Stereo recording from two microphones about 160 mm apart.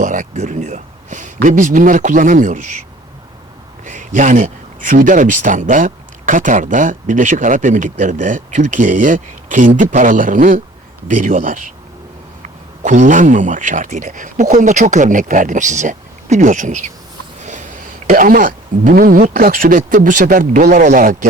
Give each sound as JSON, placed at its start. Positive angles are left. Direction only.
{"t": 0.0, "sound": "a sound", "side_deg": -50}
{"t": 1.4, "sound": "speech", "side_deg": -55}
{"t": 3.8, "sound": "speech", "side_deg": -55}